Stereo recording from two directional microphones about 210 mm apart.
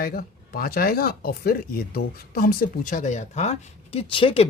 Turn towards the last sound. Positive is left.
turn(degrees=25)  # may be behind; listen again after turning